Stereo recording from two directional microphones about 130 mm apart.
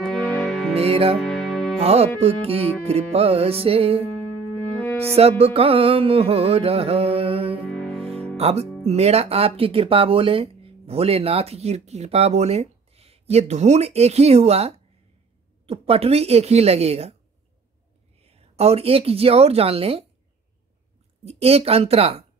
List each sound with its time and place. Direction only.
0.0 s music: centre (ahead or behind)
0.7 s speech: 50° right (ahead or behind)
1.2 s music: centre (ahead or behind)
1.8 s speech: 50° right (ahead or behind)
5.4 s music: 45° right (ahead or behind)
7.7 s music: 5° left (ahead or behind)
8.4 s speech: 55° right (ahead or behind)
18.2 s a woman's voice: 50° right (ahead or behind)
21.2 s speech: 50° right (ahead or behind)